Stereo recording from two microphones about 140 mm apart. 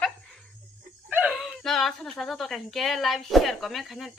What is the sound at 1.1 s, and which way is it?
Speech, 5° right (ahead or behind).